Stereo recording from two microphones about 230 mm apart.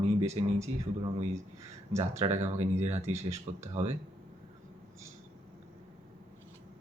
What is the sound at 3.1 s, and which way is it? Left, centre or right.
Speech, centre.